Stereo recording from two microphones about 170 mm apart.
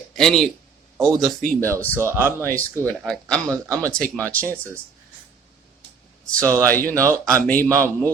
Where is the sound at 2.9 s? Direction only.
5° left (ahead or behind).